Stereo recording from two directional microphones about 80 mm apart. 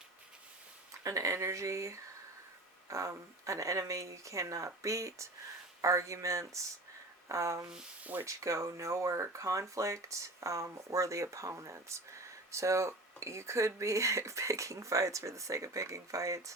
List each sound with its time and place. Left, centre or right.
1.0 s speech: right
7.7 s speech: centre
8.2 s speech: right